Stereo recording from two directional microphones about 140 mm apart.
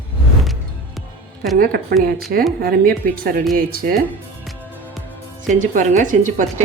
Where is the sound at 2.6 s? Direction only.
90° right.